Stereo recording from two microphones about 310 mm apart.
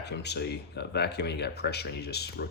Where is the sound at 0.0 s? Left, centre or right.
Left.